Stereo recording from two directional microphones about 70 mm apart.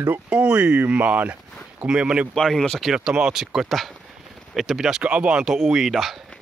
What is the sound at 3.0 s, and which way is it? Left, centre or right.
Speech, centre.